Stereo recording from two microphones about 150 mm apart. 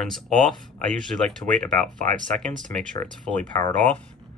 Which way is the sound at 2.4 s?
5° left (ahead or behind).